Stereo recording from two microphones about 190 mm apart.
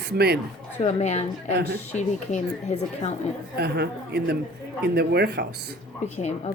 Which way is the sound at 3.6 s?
60° right (ahead or behind).